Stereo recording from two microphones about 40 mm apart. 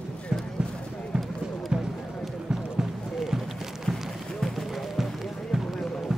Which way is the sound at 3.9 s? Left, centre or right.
Centre.